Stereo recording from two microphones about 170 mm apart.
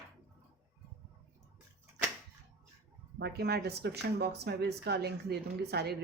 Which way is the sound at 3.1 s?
70° right (ahead or behind).